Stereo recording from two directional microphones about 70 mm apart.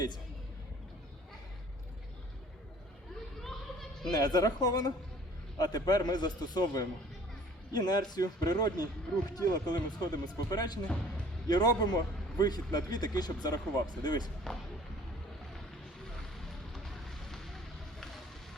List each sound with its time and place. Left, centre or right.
3.4 s a sound: centre
4.1 s speech: left
14.5 s speech: centre
16.4 s music: centre